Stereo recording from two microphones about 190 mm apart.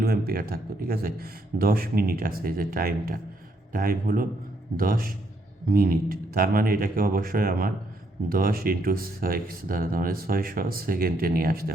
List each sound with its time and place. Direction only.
0.0 s speech: 55° right (ahead or behind)